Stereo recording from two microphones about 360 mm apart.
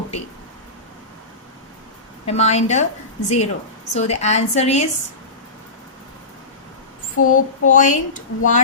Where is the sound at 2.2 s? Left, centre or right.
Centre.